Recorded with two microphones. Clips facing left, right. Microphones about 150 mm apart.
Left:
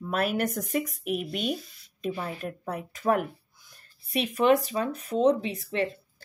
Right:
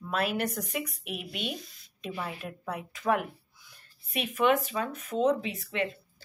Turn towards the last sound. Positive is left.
turn(degrees=35)  # may be behind; listen again after turning